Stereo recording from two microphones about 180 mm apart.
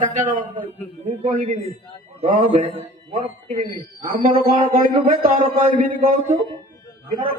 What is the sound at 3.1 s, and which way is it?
A man's voice, 50° right (ahead or behind).